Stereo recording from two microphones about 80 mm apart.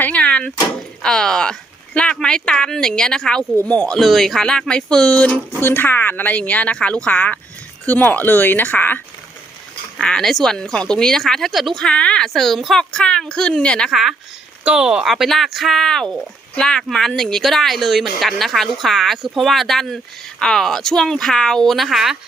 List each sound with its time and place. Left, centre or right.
0.0 s door: centre
1.0 s speech: centre
5.5 s speech: left
10.0 s speech: centre
11.9 s speech: centre
13.9 s speech: centre